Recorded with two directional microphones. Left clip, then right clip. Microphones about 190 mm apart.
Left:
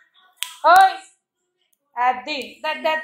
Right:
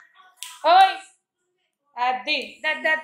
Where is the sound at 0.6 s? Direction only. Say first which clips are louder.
Left 3 dB; 5° left (ahead or behind).